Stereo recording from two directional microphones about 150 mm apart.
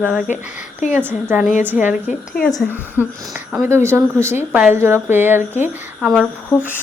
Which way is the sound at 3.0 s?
15° right (ahead or behind).